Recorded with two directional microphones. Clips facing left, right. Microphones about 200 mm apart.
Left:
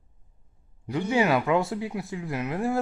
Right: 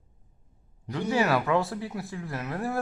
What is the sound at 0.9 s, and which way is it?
Speech, 20° left (ahead or behind).